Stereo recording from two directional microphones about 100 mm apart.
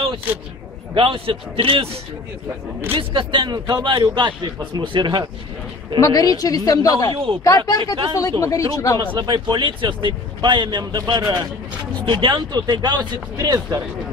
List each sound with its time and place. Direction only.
0.9 s a man's voice: 60° right (ahead or behind)
2.9 s a man's voice: 60° right (ahead or behind)
5.9 s speech: 35° left (ahead or behind)
9.1 s a man's voice: 50° right (ahead or behind)